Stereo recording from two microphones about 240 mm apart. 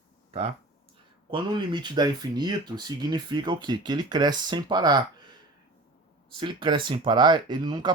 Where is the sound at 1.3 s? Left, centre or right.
Centre.